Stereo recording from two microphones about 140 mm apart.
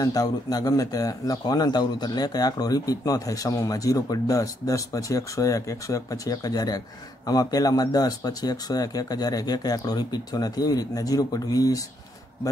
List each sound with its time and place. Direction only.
0.0 s speech: 25° left (ahead or behind)